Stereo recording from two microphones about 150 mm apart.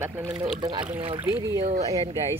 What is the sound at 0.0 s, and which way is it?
Speech, 20° right (ahead or behind).